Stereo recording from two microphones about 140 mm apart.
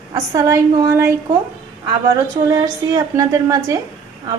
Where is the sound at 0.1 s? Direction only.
25° right (ahead or behind).